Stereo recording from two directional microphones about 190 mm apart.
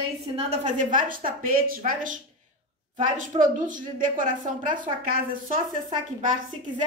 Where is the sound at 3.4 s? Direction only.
45° right (ahead or behind).